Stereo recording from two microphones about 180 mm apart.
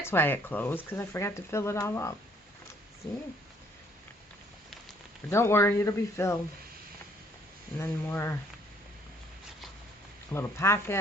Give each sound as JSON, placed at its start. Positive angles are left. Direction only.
{"t": 0.0, "sound": "speech", "side_deg": 10}
{"t": 5.3, "sound": "speech", "side_deg": 15}
{"t": 7.8, "sound": "speech", "side_deg": 15}
{"t": 10.3, "sound": "speech", "side_deg": 15}